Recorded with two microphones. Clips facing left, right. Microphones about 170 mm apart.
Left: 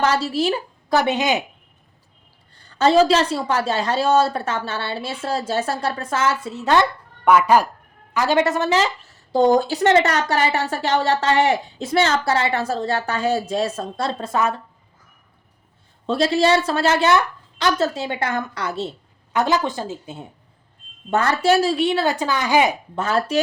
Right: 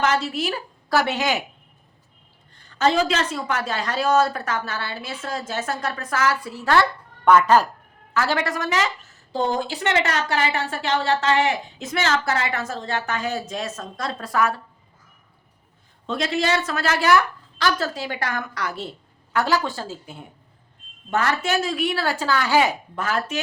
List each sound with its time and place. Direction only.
0.0 s a woman's voice: 35° left (ahead or behind); by 1.5 s 20° left (ahead or behind)
2.6 s a woman's voice: 35° left (ahead or behind)
7.3 s a woman's voice: 10° left (ahead or behind)
16.0 s a woman's voice: 35° left (ahead or behind)
21.1 s a woman's voice: 35° left (ahead or behind)